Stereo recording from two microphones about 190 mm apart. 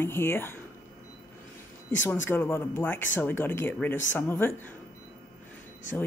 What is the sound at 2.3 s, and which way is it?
Speech, 10° left (ahead or behind).